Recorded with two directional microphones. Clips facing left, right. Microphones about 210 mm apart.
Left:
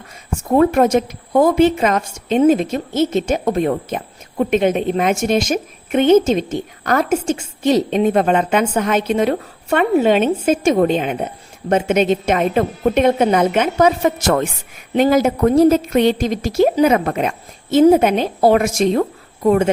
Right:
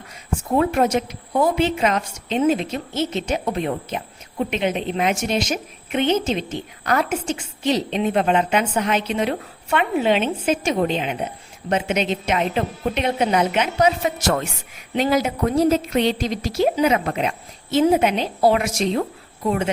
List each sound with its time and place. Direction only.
0.5 s a woman's voice: 45° left (ahead or behind)